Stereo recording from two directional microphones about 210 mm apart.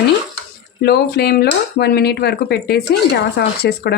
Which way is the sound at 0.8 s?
50° left (ahead or behind).